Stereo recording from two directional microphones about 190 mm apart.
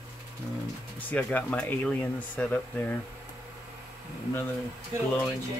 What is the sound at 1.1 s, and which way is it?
Speech, 10° left (ahead or behind).